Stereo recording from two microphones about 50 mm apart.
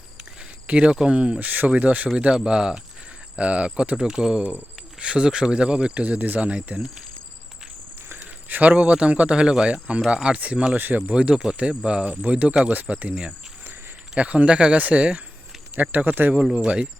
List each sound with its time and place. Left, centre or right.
0.7 s speech: right
1.5 s speech: right
2.2 s speech: centre
3.9 s speech: centre; by 6.5 s right
8.4 s speech: right
8.8 s speech: right
10.8 s speech: right
11.1 s speech: right
14.2 s speech: right
15.7 s speech: right
16.3 s speech: centre